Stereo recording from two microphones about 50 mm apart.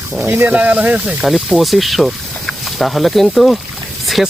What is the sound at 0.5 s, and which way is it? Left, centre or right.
Speech, right.